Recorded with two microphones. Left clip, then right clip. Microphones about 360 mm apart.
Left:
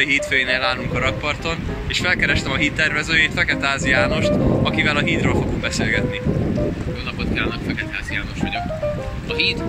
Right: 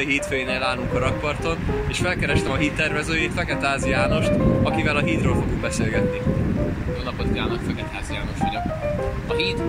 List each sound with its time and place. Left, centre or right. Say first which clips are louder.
0.0 s speech: left 5 dB; centre